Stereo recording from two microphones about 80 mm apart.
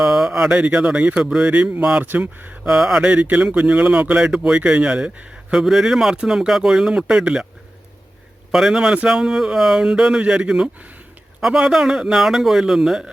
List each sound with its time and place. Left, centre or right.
0.0 s mantra: centre
1.5 s speech: centre
2.6 s speech: centre
8.5 s a man's voice: centre